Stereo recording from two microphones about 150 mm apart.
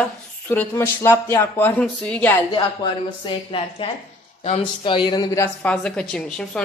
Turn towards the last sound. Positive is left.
turn(degrees=5)  # may be behind; listen again after turning